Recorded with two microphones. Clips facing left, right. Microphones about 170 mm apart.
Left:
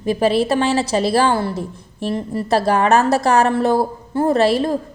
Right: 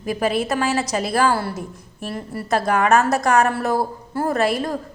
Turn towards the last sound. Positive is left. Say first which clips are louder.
# left 5 dB
turn(degrees=30)  # may be behind; listen again after turning